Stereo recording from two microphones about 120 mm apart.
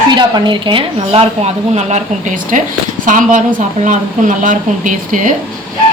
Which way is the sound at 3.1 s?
90° right.